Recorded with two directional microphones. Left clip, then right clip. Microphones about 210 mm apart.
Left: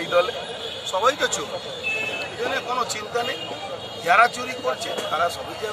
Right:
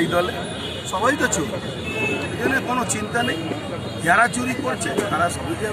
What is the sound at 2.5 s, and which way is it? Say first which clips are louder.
A man's voice: right 3 dB; 10° right (ahead or behind).